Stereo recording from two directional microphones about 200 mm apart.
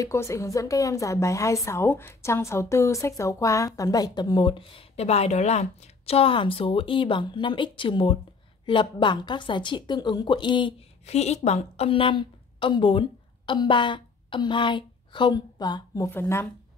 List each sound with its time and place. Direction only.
0.0 s a woman's voice: 15° left (ahead or behind)